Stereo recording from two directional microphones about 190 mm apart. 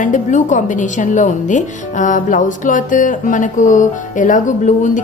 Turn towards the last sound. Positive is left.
turn(degrees=40)  # may be behind; listen again after turning